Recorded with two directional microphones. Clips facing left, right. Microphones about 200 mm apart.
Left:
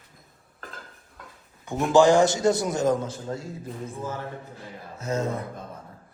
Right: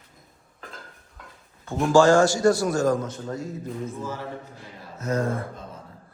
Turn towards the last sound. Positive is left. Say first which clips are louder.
# right 2 dB
turn(degrees=20)  # may be behind; listen again after turning